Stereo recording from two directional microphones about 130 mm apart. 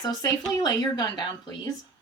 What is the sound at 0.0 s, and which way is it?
Speech, 30° left (ahead or behind).